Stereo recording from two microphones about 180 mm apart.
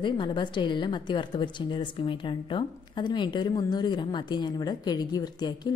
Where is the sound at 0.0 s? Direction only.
25° left (ahead or behind).